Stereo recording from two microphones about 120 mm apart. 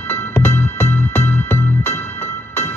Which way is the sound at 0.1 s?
20° left (ahead or behind).